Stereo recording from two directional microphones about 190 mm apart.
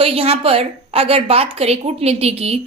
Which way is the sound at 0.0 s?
30° right (ahead or behind).